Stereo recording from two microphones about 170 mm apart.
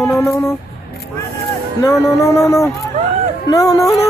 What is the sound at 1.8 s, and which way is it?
Music, 15° left (ahead or behind).